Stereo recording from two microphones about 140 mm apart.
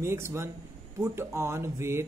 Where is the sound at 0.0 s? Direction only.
20° right (ahead or behind).